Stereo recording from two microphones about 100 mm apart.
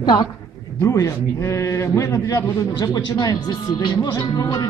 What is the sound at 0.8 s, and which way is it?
A man's voice, 30° left (ahead or behind).